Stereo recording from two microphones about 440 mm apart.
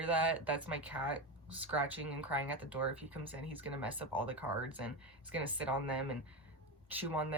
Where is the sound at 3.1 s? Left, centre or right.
Right.